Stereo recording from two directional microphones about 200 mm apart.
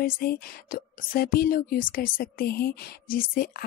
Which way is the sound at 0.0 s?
50° left (ahead or behind).